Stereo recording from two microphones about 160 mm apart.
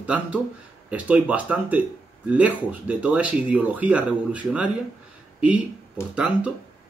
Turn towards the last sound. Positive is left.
turn(degrees=-5)  # may be behind; listen again after turning